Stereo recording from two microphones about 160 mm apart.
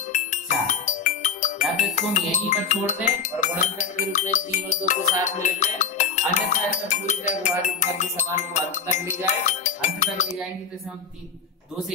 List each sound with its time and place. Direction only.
0.1 s music: 50° left (ahead or behind)
2.0 s speech: 50° left (ahead or behind)